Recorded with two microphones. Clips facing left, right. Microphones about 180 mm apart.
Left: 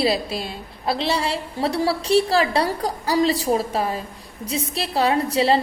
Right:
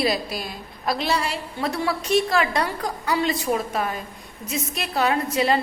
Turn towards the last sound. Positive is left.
turn(degrees=30)  # may be behind; listen again after turning